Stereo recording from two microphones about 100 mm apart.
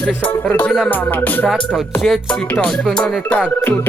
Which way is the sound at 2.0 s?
5° left (ahead or behind).